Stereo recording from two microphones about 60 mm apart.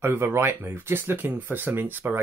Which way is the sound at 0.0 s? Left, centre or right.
Right.